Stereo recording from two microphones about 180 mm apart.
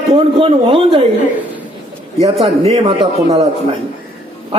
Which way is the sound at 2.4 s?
35° right (ahead or behind).